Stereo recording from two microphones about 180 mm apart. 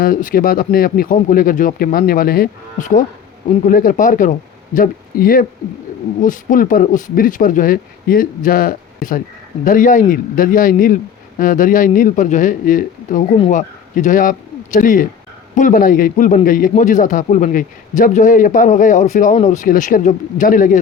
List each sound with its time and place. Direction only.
0.0 s speech: 50° left (ahead or behind)